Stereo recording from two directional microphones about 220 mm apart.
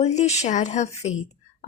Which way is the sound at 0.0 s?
30° left (ahead or behind).